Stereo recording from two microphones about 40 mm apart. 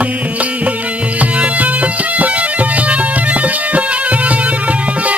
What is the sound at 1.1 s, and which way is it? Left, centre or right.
Music, right.